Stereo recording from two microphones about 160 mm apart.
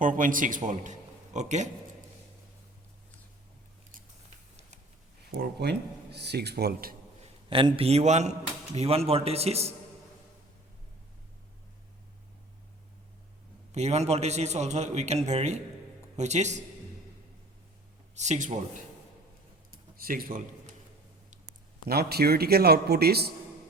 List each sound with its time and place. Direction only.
0.0 s a man's voice: 55° right (ahead or behind)
5.4 s speech: 90° right
7.5 s a man's voice: 35° right (ahead or behind)
13.7 s a man's voice: 45° right (ahead or behind)
18.1 s a man's voice: 45° right (ahead or behind)
19.7 s a sound: 65° right (ahead or behind)
21.8 s speech: 75° right (ahead or behind)